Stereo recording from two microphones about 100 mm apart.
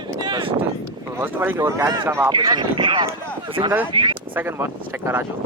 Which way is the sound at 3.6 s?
20° right (ahead or behind).